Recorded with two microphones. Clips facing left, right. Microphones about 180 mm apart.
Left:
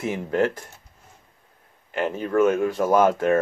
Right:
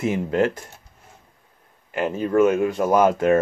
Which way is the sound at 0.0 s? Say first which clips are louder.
Right 2 dB; 10° right (ahead or behind).